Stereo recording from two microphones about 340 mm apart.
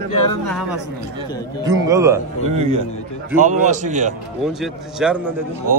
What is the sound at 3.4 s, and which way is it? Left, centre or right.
Speech, right.